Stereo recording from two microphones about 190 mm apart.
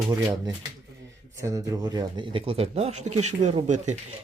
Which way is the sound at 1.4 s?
15° right (ahead or behind).